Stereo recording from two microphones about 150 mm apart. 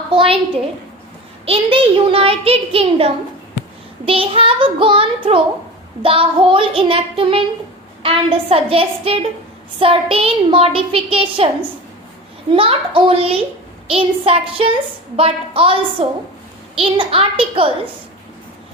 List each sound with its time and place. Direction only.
0.1 s a woman's voice: 35° right (ahead or behind)
1.5 s a child's voice: 40° right (ahead or behind)
12.5 s a child's voice: 35° right (ahead or behind)